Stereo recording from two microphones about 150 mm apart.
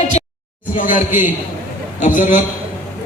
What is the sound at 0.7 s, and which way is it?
A man's voice, 60° left (ahead or behind).